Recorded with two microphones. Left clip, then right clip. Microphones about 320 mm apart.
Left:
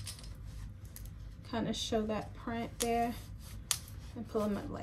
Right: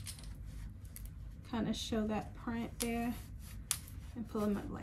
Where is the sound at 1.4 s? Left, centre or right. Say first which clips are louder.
Left 3 dB; centre.